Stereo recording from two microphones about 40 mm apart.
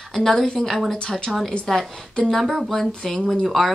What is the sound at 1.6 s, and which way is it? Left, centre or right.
Speech, centre.